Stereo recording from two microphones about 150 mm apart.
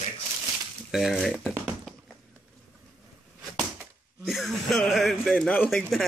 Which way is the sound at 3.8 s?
Centre (ahead or behind).